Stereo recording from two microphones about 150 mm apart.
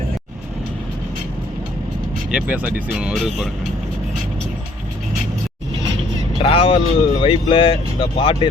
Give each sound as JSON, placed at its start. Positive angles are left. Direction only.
{"t": 2.3, "sound": "speech", "side_deg": -10}
{"t": 6.4, "sound": "speech", "side_deg": 40}